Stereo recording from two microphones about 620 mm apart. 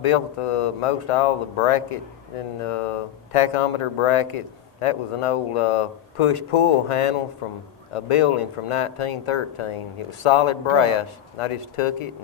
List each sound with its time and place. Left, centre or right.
0.0 s speech: left